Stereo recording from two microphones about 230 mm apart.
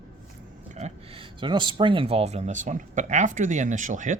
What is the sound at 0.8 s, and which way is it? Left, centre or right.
Speech, right.